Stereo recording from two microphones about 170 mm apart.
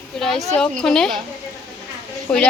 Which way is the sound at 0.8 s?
5° left (ahead or behind).